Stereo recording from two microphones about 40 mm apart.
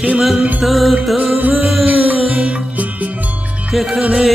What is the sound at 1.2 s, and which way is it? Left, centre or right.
Music, right.